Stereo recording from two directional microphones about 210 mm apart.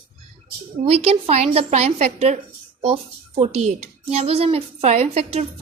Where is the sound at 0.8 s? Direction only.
30° right (ahead or behind).